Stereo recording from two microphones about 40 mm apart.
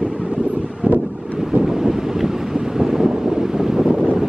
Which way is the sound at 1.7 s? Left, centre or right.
Centre.